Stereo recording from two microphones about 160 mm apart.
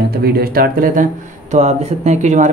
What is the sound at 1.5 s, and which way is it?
Speech, 45° right (ahead or behind).